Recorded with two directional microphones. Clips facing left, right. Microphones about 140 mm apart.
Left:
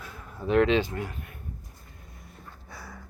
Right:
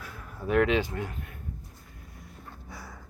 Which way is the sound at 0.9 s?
15° left (ahead or behind).